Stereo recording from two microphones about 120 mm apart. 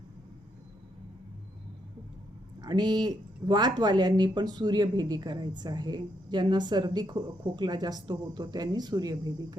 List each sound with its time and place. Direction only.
2.6 s speech: 35° right (ahead or behind)